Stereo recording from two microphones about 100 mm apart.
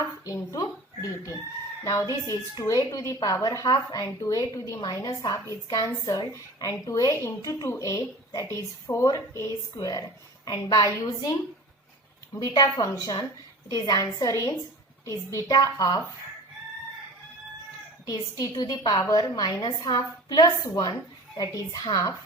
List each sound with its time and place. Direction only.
0.3 s a woman's voice: 35° left (ahead or behind)
18.0 s a woman's voice: 40° left (ahead or behind)